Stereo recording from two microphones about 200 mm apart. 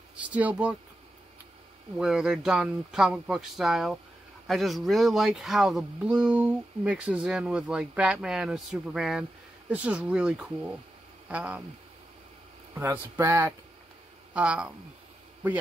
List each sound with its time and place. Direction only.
0.1 s speech: 5° right (ahead or behind)
2.0 s speech: 5° right (ahead or behind)
12.7 s speech: 10° right (ahead or behind)